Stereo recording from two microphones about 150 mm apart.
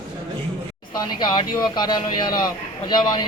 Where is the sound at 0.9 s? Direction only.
25° left (ahead or behind).